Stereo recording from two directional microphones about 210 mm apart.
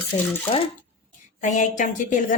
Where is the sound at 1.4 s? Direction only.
35° left (ahead or behind).